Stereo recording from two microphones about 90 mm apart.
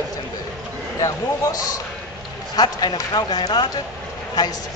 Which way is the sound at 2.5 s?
50° left (ahead or behind).